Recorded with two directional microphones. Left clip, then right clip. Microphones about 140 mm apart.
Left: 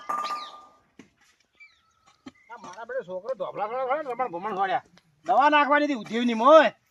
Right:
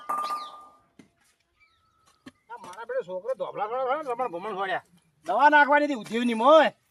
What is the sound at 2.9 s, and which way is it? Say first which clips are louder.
A man's voice: right 1 dB; 35° right (ahead or behind).